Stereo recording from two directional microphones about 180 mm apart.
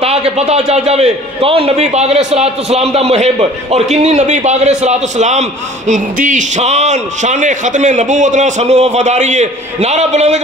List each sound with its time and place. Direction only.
0.0 s a man's voice: 35° right (ahead or behind)